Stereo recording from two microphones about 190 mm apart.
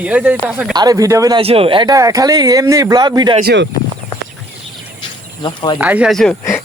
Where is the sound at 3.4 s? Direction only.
65° right (ahead or behind).